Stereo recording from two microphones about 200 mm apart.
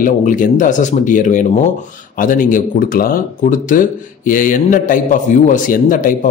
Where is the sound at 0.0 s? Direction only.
40° left (ahead or behind).